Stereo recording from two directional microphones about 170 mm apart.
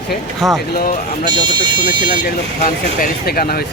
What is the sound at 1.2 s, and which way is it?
Speech, 25° right (ahead or behind).